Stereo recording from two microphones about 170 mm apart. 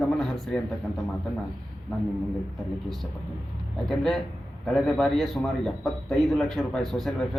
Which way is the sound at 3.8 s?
Centre (ahead or behind).